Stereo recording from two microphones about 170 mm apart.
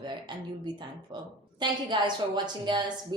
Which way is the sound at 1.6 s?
25° right (ahead or behind).